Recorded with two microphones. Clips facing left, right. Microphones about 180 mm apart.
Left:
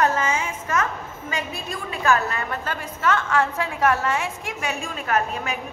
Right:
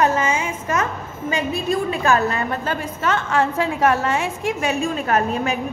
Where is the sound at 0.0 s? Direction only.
15° right (ahead or behind).